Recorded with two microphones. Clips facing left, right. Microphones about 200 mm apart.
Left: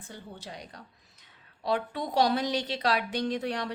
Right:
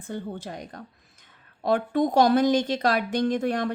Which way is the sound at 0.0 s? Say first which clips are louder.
Right 10 dB; 50° right (ahead or behind).